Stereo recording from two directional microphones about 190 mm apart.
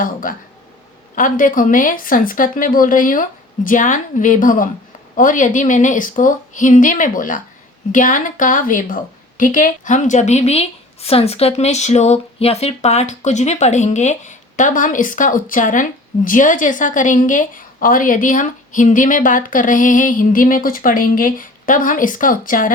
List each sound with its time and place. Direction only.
0.0 s a woman's voice: 45° left (ahead or behind)